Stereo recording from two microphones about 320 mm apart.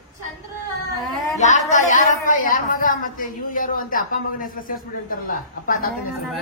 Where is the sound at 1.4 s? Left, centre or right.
Left.